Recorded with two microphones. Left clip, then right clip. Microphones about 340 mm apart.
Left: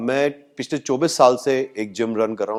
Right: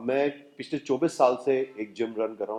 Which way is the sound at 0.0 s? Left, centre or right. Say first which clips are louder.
Left 6 dB; left.